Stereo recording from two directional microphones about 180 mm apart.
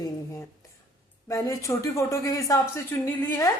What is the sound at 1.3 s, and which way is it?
Speech, 15° left (ahead or behind).